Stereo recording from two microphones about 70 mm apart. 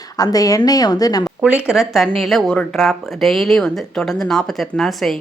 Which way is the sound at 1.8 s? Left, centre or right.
Centre.